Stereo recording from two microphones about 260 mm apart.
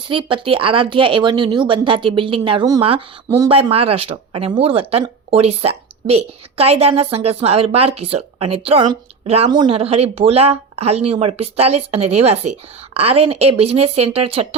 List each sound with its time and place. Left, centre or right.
0.1 s speech: centre